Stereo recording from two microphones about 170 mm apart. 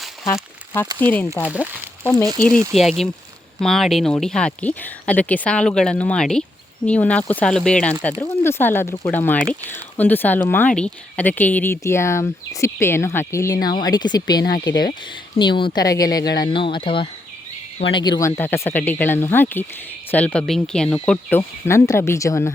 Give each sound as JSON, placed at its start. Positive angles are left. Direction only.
{"t": 1.0, "sound": "speech", "side_deg": 10}
{"t": 1.3, "sound": "speech", "side_deg": -10}
{"t": 2.7, "sound": "speech", "side_deg": 0}